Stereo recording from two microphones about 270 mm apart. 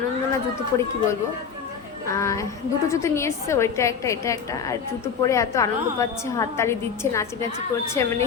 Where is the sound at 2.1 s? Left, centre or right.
Centre.